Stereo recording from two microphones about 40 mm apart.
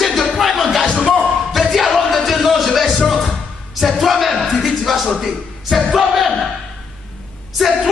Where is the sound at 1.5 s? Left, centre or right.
Centre.